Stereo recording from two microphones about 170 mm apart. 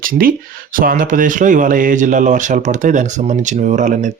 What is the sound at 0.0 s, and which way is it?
A man's voice, 55° right (ahead or behind).